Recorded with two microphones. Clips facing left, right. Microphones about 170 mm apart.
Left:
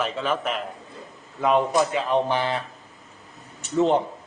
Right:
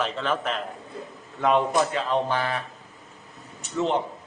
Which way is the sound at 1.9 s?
15° left (ahead or behind).